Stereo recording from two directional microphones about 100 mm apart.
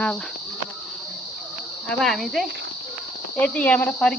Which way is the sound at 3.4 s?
15° left (ahead or behind).